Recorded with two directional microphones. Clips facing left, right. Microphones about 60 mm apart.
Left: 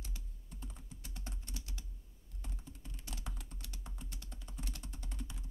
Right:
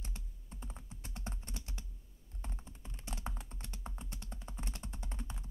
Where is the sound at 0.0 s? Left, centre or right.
Right.